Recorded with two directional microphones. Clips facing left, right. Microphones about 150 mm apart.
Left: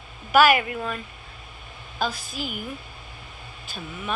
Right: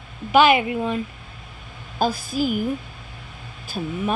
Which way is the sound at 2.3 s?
40° right (ahead or behind).